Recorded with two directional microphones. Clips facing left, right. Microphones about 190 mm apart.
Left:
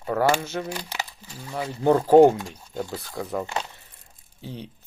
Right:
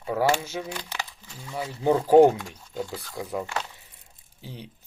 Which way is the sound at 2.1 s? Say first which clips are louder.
Left 1 dB; 15° left (ahead or behind).